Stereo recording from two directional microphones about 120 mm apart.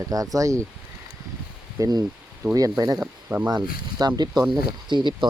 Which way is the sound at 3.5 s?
35° right (ahead or behind).